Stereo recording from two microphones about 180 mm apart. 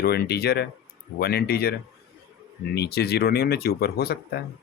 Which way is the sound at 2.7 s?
65° left (ahead or behind).